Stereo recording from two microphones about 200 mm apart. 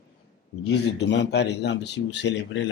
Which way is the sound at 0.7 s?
60° left (ahead or behind).